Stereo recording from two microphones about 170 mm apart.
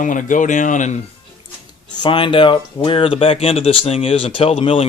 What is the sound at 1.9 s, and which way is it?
Speech, 30° left (ahead or behind).